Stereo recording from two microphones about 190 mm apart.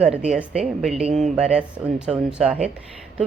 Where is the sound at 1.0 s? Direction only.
35° right (ahead or behind).